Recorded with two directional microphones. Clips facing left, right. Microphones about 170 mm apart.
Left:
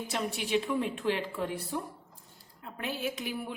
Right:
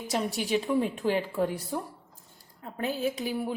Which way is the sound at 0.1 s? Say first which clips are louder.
Right 3 dB; 40° right (ahead or behind).